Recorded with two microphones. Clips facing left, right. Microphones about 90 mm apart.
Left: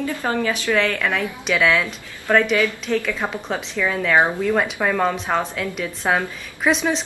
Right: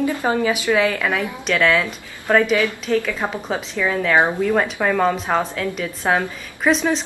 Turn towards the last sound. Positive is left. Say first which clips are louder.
# right 2 dB
turn(degrees=0)  # may be behind; listen again after turning